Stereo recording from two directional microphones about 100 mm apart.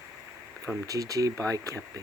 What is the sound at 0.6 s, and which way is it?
Speech, 35° right (ahead or behind).